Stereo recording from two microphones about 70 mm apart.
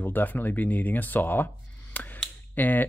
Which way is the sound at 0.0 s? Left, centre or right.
Left.